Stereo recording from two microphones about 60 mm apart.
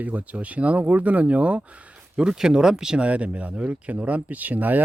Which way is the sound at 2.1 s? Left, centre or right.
Centre.